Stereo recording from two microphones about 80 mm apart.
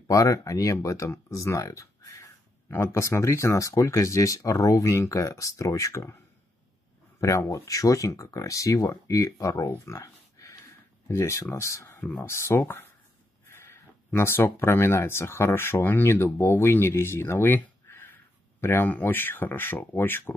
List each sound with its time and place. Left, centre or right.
0.1 s speech: left
7.2 s speech: left